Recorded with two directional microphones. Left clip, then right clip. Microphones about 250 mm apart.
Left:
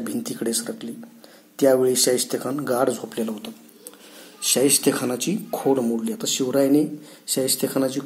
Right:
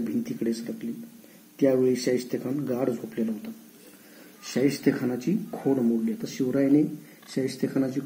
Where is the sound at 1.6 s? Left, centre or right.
Left.